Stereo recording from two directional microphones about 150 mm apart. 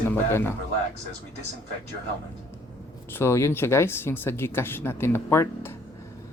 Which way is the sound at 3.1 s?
15° left (ahead or behind).